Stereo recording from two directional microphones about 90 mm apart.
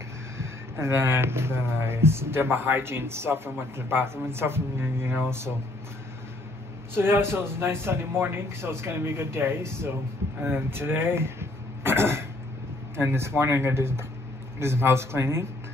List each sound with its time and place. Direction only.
0.4 s speech: 30° right (ahead or behind)
6.9 s speech: 25° right (ahead or behind)
10.4 s throat clearing: 25° right (ahead or behind)
12.9 s speech: 30° right (ahead or behind)